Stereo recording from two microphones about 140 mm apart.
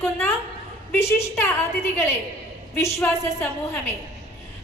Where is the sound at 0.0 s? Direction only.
15° left (ahead or behind).